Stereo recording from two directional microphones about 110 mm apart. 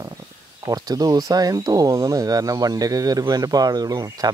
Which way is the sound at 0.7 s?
35° right (ahead or behind).